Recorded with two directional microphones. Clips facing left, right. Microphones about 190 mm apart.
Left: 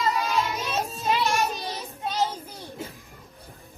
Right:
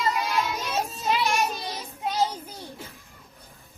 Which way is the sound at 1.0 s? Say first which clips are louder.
Left 1 dB; centre (ahead or behind).